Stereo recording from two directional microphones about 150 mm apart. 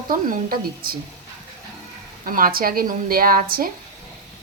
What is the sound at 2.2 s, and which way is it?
Speech, 70° right (ahead or behind).